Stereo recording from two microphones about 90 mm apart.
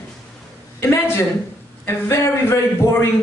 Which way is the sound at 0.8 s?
30° left (ahead or behind).